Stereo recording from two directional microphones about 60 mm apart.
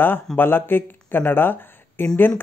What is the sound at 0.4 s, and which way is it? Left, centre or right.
Speech, left.